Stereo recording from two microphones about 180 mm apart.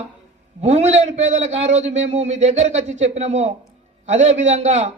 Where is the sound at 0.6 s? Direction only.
40° right (ahead or behind).